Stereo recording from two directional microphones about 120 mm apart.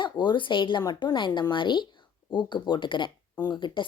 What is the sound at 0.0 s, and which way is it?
Speech, 40° left (ahead or behind).